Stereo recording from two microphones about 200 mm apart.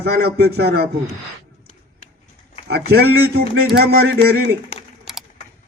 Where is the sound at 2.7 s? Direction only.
55° right (ahead or behind).